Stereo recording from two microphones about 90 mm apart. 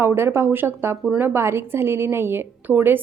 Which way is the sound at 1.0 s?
15° right (ahead or behind).